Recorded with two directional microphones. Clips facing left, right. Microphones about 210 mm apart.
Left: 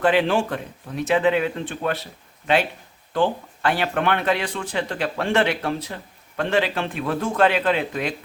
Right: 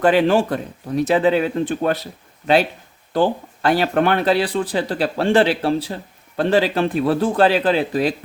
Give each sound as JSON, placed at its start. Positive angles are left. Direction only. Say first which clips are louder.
{"t": 0.0, "sound": "speech", "louder": "right 4 dB", "side_deg": -40}
{"t": 3.1, "sound": "speech", "louder": "right 3 dB", "side_deg": -40}